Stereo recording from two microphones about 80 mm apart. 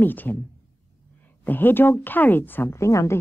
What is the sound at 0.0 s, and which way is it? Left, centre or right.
Speech, left.